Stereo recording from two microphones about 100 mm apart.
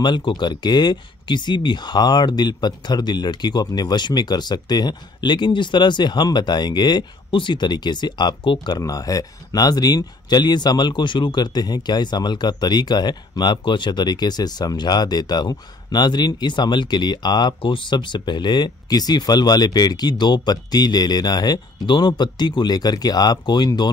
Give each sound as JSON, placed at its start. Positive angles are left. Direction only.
{"t": 0.0, "sound": "speech", "side_deg": 50}